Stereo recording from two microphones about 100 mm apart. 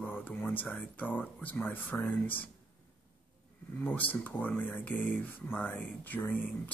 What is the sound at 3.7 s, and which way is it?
Speech, 15° left (ahead or behind).